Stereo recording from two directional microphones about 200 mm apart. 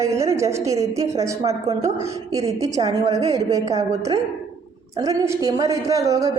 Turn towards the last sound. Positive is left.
turn(degrees=-15)  # may be behind; listen again after turning